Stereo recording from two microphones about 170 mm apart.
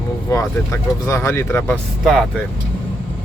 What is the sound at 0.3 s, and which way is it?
Speech, 15° left (ahead or behind).